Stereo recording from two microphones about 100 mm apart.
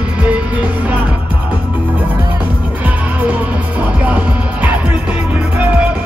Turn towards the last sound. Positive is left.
turn(degrees=-15)  # may be behind; listen again after turning